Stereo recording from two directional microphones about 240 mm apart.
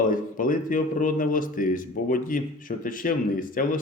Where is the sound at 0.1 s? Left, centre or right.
Left.